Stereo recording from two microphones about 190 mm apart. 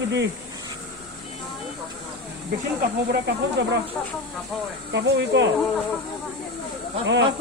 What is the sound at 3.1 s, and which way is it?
Speech, 60° right (ahead or behind).